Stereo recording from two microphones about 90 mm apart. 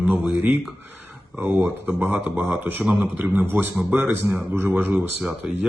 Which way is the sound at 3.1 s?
20° right (ahead or behind).